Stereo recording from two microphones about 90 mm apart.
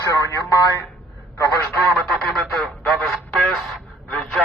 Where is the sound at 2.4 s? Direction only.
Centre (ahead or behind).